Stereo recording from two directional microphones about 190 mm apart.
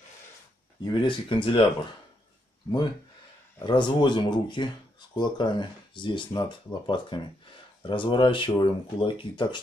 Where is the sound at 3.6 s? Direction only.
25° left (ahead or behind).